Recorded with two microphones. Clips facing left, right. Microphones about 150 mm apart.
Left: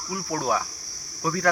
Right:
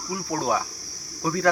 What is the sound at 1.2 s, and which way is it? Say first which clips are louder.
Cricket: right 1 dB; 20° right (ahead or behind).